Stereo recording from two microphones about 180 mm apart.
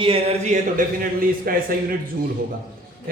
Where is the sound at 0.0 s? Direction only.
30° right (ahead or behind); by 1.6 s 55° right (ahead or behind).